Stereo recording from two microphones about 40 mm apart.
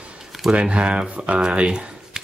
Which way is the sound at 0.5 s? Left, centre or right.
Right.